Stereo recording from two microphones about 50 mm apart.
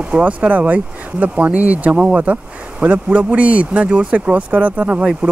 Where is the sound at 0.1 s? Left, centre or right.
Right.